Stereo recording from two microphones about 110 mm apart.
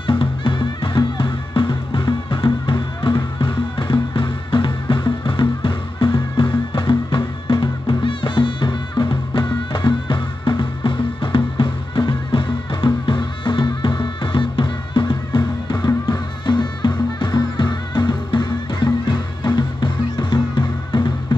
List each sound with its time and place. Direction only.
0.0 s music: 50° left (ahead or behind)